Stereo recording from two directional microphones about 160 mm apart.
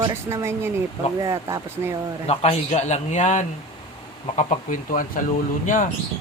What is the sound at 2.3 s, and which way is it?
A man's voice, 40° left (ahead or behind).